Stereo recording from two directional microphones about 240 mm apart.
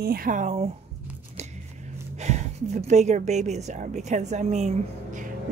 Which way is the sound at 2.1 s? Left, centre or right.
Right.